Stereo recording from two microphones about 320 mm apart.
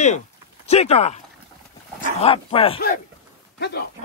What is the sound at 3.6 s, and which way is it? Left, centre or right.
Speech, left.